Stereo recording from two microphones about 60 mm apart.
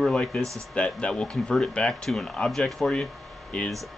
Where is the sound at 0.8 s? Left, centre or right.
Centre.